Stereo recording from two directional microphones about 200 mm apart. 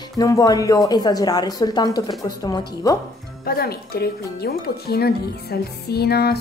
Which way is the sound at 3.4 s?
50° left (ahead or behind).